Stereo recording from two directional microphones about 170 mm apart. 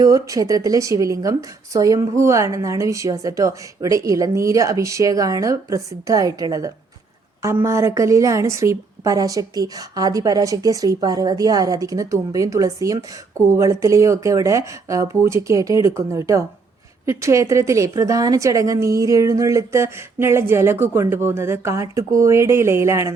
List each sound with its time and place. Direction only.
0.0 s a woman's voice: 20° right (ahead or behind)